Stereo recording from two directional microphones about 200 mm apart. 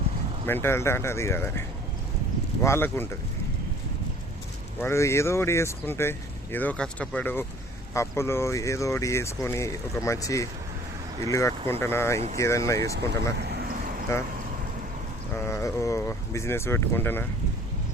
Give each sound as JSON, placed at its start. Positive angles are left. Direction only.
{"t": 0.4, "sound": "speech", "side_deg": 10}
{"t": 4.8, "sound": "speech", "side_deg": 15}
{"t": 13.4, "sound": "a sound", "side_deg": -50}
{"t": 15.4, "sound": "speech", "side_deg": 15}